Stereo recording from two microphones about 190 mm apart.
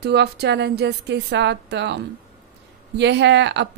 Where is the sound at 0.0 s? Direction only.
60° right (ahead or behind).